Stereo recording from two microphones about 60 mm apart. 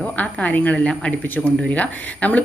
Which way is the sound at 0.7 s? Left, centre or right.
Centre.